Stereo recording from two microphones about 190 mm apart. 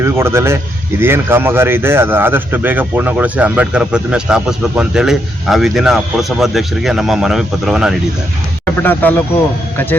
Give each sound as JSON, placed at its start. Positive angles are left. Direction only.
{"t": 0.0, "sound": "speech", "side_deg": -15}
{"t": 8.6, "sound": "speech", "side_deg": 10}